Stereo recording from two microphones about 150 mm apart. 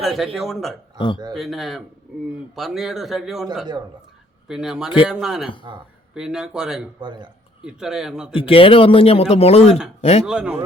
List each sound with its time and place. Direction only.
0.0 s a man's voice: centre (ahead or behind)
0.9 s a man's voice: 30° left (ahead or behind)
1.3 s a man's voice: centre (ahead or behind)
4.4 s a man's voice: 5° right (ahead or behind)
7.0 s a man's voice: 30° right (ahead or behind)
7.6 s a man's voice: 5° right (ahead or behind)
8.3 s speech: 35° left (ahead or behind)
10.2 s a man's voice: 5° right (ahead or behind)